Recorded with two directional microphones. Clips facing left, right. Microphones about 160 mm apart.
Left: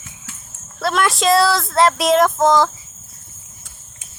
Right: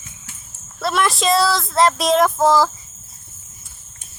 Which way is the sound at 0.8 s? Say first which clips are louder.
Left 1 dB; centre (ahead or behind).